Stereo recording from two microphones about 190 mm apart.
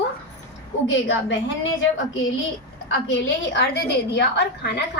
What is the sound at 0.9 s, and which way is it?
Speech, 75° left (ahead or behind).